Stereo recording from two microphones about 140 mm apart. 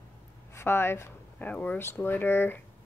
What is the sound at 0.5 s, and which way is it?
A woman's voice, 15° left (ahead or behind).